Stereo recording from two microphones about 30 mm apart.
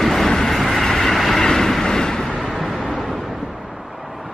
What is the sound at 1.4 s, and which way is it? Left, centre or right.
Vehicle, centre.